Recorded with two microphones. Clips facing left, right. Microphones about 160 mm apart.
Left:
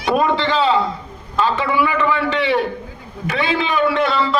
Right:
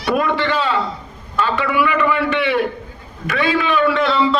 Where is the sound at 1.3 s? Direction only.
25° left (ahead or behind).